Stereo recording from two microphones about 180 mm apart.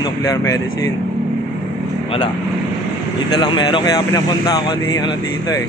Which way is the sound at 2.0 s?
30° left (ahead or behind).